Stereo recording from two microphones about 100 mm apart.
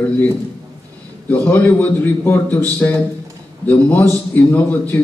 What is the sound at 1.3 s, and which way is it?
A man's voice, 20° left (ahead or behind).